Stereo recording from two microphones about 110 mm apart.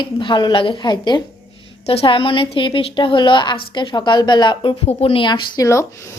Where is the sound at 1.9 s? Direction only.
55° left (ahead or behind).